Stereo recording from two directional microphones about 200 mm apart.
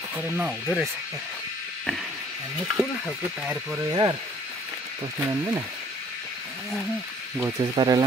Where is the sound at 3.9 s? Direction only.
20° right (ahead or behind).